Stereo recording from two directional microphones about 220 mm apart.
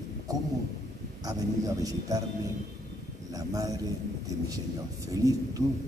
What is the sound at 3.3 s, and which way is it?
Speech, 15° right (ahead or behind).